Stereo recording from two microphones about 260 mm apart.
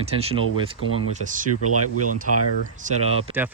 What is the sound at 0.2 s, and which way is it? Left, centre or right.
Speech, right.